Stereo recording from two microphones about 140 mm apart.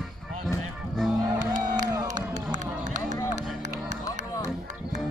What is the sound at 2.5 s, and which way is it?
Run, 60° right (ahead or behind).